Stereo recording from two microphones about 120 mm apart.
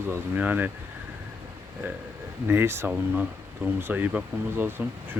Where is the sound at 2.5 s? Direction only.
20° right (ahead or behind).